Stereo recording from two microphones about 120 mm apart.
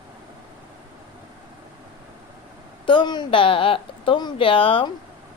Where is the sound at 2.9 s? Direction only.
40° left (ahead or behind).